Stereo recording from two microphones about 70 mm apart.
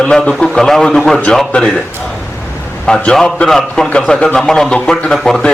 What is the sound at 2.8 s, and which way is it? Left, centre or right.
A man's voice, centre.